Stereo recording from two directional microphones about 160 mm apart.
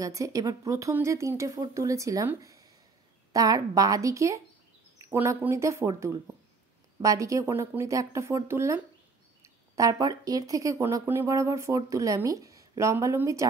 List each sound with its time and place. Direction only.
0.0 s speech: 20° right (ahead or behind)